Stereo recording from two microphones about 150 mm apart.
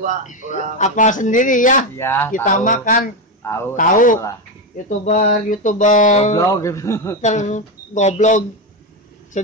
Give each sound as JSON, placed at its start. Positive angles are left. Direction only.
{"t": 0.3, "sound": "speech", "side_deg": 55}
{"t": 2.0, "sound": "speech", "side_deg": 15}
{"t": 2.4, "sound": "speech", "side_deg": 60}
{"t": 6.5, "sound": "a man's voice", "side_deg": 20}
{"t": 7.2, "sound": "speech", "side_deg": 55}